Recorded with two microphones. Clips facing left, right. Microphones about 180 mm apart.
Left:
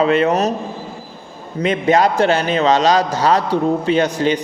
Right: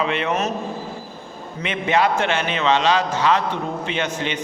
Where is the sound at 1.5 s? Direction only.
40° left (ahead or behind).